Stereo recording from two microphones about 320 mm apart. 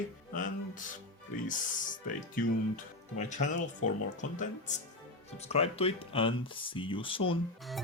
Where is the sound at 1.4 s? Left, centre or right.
Left.